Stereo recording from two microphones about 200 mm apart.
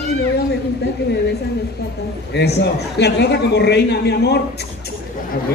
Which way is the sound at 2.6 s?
55° left (ahead or behind).